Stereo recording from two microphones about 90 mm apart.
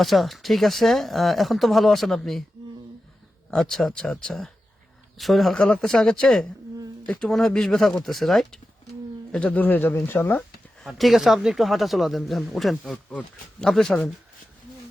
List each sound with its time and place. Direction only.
0.0 s speech: centre (ahead or behind)
3.5 s speech: 5° left (ahead or behind)
9.3 s speech: 15° left (ahead or behind)
10.8 s speech: centre (ahead or behind)
13.1 s speech: 15° left (ahead or behind)